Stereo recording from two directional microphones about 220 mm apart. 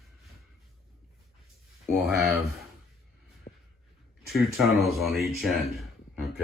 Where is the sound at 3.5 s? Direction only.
30° left (ahead or behind).